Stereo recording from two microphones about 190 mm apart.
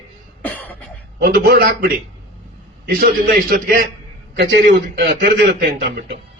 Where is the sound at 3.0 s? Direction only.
50° right (ahead or behind).